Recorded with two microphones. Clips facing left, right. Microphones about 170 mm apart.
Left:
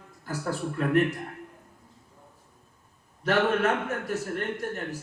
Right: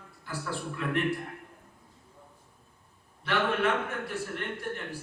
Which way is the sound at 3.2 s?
40° left (ahead or behind).